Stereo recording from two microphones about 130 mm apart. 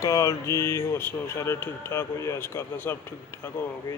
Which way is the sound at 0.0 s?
25° left (ahead or behind).